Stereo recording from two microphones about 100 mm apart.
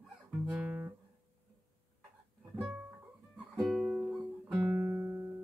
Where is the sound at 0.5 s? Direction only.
15° right (ahead or behind).